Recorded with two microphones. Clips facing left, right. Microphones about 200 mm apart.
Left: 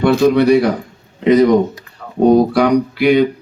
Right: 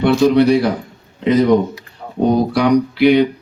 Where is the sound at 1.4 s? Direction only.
50° left (ahead or behind).